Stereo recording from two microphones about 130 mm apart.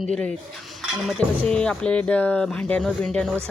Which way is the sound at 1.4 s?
5° left (ahead or behind).